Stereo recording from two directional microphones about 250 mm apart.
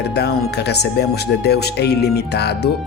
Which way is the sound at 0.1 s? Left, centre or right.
Left.